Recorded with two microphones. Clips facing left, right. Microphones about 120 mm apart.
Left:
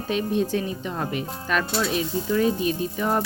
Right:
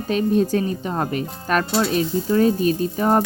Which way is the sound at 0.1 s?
40° right (ahead or behind).